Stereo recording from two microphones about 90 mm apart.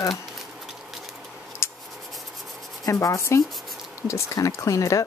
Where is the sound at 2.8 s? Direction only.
35° left (ahead or behind).